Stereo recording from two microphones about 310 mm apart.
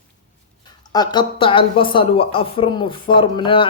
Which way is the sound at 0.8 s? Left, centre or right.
Centre.